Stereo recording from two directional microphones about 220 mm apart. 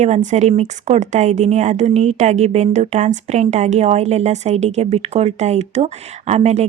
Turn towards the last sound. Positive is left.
turn(degrees=-30)  # may be behind; listen again after turning